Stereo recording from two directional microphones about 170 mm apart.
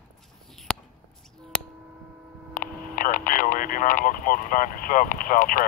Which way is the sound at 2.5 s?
50° left (ahead or behind).